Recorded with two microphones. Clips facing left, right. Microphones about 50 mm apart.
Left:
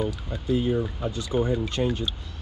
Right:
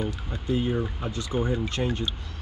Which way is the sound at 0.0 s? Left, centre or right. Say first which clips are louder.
Left 2 dB; centre.